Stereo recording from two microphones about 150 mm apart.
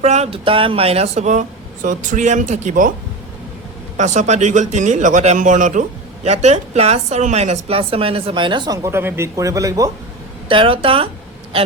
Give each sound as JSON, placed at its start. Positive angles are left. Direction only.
{"t": 0.0, "sound": "speech", "side_deg": -45}
{"t": 3.9, "sound": "speech", "side_deg": -55}
{"t": 8.8, "sound": "speech", "side_deg": -15}
{"t": 10.5, "sound": "speech", "side_deg": -35}